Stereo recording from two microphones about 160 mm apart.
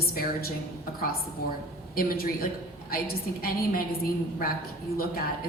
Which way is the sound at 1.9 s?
65° left (ahead or behind).